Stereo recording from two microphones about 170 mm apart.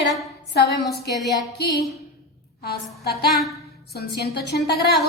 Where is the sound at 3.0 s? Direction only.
70° left (ahead or behind).